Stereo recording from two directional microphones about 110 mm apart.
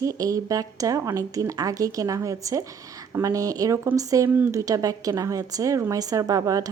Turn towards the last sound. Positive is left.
turn(degrees=-30)  # may be behind; listen again after turning